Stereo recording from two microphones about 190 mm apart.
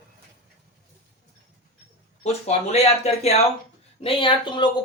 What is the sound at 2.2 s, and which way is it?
Speech, 35° left (ahead or behind).